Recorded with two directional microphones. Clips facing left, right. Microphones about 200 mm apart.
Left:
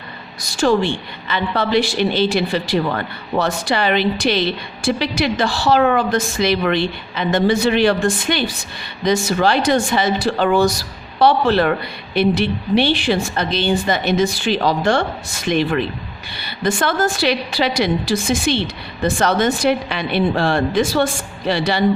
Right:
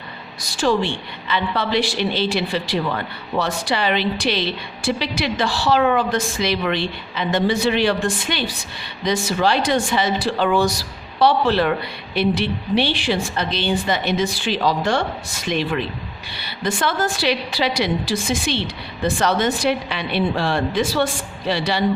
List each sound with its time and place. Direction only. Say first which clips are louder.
0.5 s a woman's voice: left 3 dB; 45° left (ahead or behind)